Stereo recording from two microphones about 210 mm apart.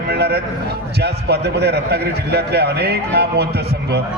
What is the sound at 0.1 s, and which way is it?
A man's voice, 50° right (ahead or behind).